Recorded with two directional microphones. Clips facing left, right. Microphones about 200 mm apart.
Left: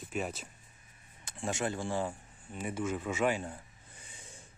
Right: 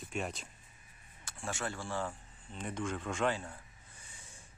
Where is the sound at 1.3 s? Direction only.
20° left (ahead or behind).